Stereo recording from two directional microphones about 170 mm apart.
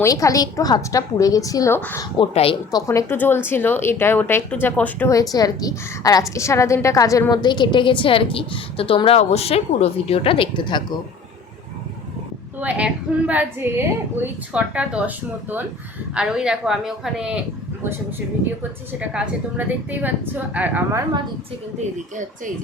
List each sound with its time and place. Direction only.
0.0 s speech: 20° left (ahead or behind)
2.1 s a woman's voice: 35° left (ahead or behind)
2.7 s speech: 20° left (ahead or behind)
12.5 s a woman's voice: 10° right (ahead or behind)
18.9 s a woman's voice: 5° right (ahead or behind)